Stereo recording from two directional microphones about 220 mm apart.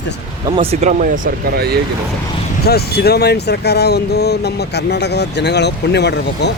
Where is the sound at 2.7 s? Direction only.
45° left (ahead or behind).